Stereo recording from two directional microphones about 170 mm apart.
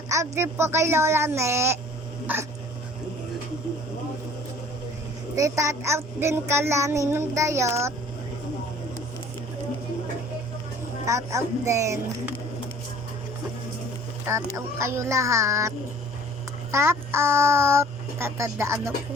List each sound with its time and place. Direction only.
0.1 s a child's voice: 15° right (ahead or behind)
5.4 s a child's voice: 20° right (ahead or behind)
11.0 s a child's voice: 15° right (ahead or behind)
14.3 s a child's voice: 15° right (ahead or behind)
16.7 s a child's voice: 15° right (ahead or behind)